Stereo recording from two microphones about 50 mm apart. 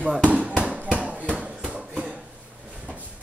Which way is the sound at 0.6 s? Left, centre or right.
Right.